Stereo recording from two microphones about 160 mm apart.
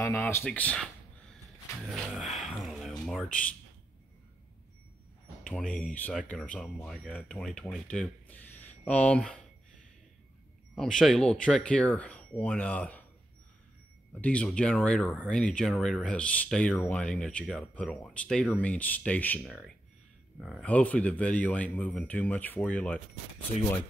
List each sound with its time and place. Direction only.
0.0 s speech: 15° left (ahead or behind)
1.9 s a sound: centre (ahead or behind)
3.1 s speech: 5° left (ahead or behind)
5.4 s a sound: 5° left (ahead or behind)
6.2 s speech: 5° left (ahead or behind)
10.7 s speech: 5° left (ahead or behind)
14.2 s speech: 5° left (ahead or behind)